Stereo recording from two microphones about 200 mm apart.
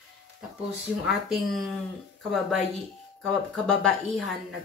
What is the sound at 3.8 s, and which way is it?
Speech, 5° left (ahead or behind).